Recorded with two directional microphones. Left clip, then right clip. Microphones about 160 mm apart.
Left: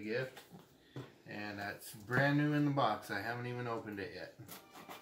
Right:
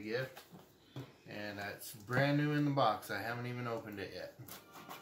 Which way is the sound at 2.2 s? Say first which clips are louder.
Left 1 dB; 20° right (ahead or behind).